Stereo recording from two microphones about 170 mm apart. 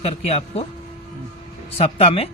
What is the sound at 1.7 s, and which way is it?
Speech, 35° left (ahead or behind).